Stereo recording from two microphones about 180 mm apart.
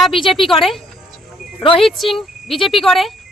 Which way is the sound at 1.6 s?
30° left (ahead or behind).